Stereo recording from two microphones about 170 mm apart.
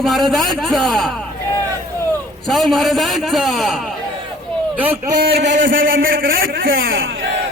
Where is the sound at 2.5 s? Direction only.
Centre (ahead or behind).